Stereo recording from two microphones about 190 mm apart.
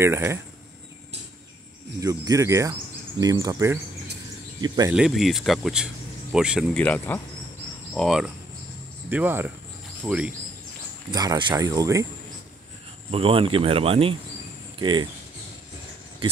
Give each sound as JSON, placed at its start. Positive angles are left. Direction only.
{"t": 0.0, "sound": "speech", "side_deg": -15}
{"t": 2.0, "sound": "speech", "side_deg": -15}
{"t": 4.9, "sound": "speech", "side_deg": 0}
{"t": 6.8, "sound": "speech", "side_deg": 10}
{"t": 9.1, "sound": "speech", "side_deg": -10}
{"t": 11.1, "sound": "speech", "side_deg": -20}
{"t": 13.1, "sound": "speech", "side_deg": -30}